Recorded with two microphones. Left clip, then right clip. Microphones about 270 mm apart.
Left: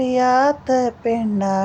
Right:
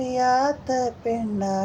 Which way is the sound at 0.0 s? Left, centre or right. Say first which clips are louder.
Left 5 dB; left.